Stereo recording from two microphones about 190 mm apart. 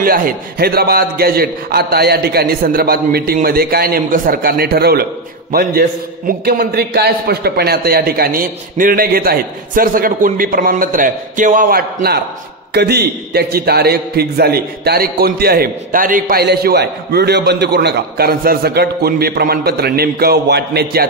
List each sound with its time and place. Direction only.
0.0 s a man's voice: 50° right (ahead or behind)